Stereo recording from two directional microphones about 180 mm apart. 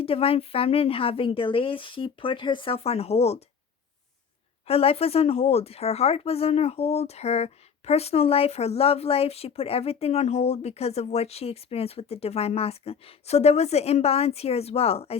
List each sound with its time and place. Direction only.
0.0 s speech: 30° left (ahead or behind)
4.6 s speech: 35° left (ahead or behind)